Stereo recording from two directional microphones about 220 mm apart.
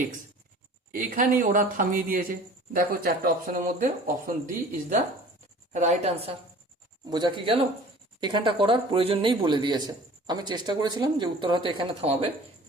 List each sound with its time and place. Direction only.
0.9 s speech: 40° right (ahead or behind)